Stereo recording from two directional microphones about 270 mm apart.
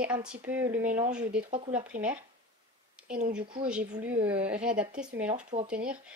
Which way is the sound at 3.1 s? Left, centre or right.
Right.